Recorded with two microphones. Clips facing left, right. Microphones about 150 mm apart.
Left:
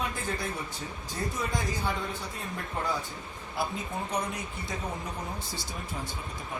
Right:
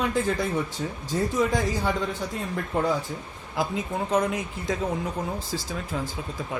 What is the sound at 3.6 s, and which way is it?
Speech, 90° right.